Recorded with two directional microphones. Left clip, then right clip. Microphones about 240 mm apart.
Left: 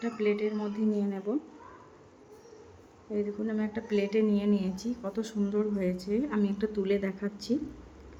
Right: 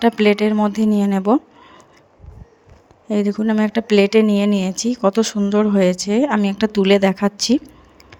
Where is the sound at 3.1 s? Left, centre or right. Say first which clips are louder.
Right 13 dB; right.